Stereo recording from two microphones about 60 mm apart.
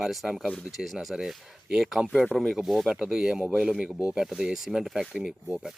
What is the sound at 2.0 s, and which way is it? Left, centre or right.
Speech, centre.